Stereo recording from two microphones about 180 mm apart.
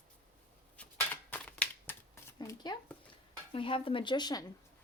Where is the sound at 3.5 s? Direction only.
30° left (ahead or behind).